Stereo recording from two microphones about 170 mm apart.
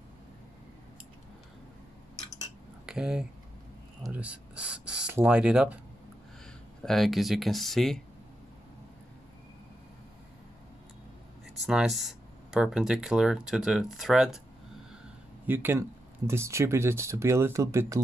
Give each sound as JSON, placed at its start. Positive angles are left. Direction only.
{"t": 2.9, "sound": "speech", "side_deg": -5}
{"t": 6.8, "sound": "speech", "side_deg": 0}
{"t": 11.6, "sound": "speech", "side_deg": 0}
{"t": 15.4, "sound": "speech", "side_deg": -10}